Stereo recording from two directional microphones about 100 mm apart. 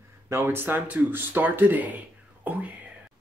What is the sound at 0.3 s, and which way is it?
A man's voice, 25° right (ahead or behind).